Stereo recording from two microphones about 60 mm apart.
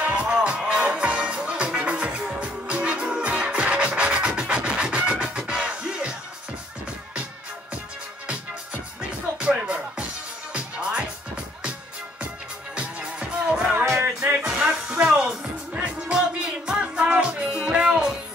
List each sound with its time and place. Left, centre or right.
0.0 s music: right
9.4 s music: centre
12.7 s music: centre